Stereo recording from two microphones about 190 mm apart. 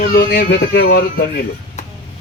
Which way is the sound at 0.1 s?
60° left (ahead or behind).